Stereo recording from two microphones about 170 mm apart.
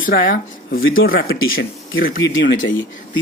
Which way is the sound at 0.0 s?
55° left (ahead or behind).